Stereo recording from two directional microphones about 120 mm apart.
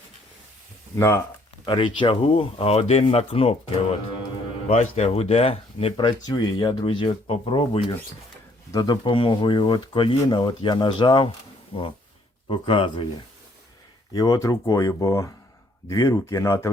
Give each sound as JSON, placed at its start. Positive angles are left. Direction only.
{"t": 0.9, "sound": "speech", "side_deg": 25}
{"t": 1.6, "sound": "speech", "side_deg": 45}
{"t": 4.7, "sound": "speech", "side_deg": 70}
{"t": 8.7, "sound": "speech", "side_deg": 40}
{"t": 12.5, "sound": "speech", "side_deg": 45}
{"t": 14.1, "sound": "speech", "side_deg": 30}